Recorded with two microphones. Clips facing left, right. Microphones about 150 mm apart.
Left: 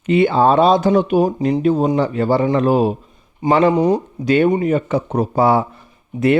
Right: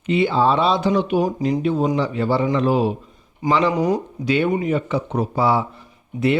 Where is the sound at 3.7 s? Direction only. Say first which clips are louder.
Left 5 dB; 30° left (ahead or behind).